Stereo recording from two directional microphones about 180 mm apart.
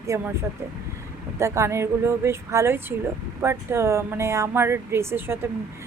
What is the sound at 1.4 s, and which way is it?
Speech, 15° right (ahead or behind).